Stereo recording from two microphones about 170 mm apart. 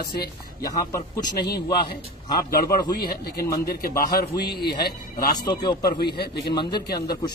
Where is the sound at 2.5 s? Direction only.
60° left (ahead or behind).